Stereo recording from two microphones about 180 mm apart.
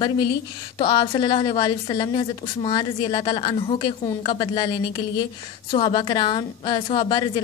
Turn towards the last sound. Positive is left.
turn(degrees=25)  # may be behind; listen again after turning